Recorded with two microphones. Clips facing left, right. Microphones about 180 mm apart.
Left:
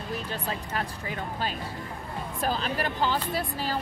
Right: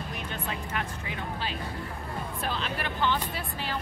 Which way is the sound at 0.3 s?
35° left (ahead or behind).